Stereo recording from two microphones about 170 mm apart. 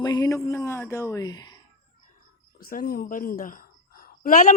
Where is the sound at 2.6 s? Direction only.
60° left (ahead or behind).